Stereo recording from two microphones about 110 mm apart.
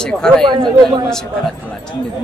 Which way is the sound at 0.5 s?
45° right (ahead or behind).